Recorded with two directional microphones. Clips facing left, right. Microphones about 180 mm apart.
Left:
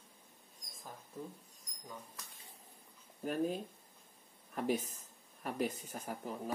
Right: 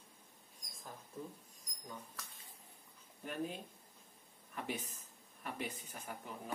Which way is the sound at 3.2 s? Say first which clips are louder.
Left 7 dB; 40° left (ahead or behind).